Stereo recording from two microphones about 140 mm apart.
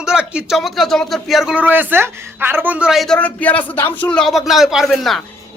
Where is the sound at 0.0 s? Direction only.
5° right (ahead or behind).